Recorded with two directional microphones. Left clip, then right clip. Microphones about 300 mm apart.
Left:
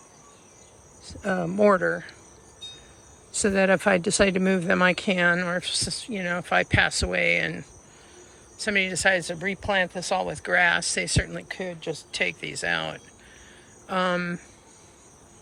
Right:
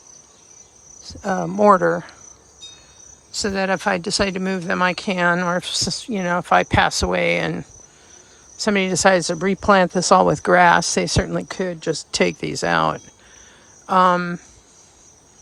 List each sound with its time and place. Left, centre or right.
1.2 s speech: centre
1.8 s speech: right
3.4 s speech: centre
8.5 s speech: centre
9.6 s speech: right
10.4 s speech: centre
11.8 s speech: right; by 14.4 s centre